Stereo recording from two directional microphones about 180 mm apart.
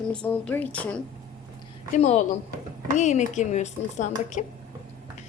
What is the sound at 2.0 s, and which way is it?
A woman's voice, 40° left (ahead or behind).